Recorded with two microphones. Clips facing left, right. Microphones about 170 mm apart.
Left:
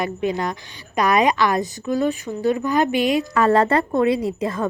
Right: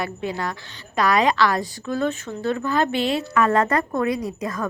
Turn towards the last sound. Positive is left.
turn(degrees=25)  # may be behind; listen again after turning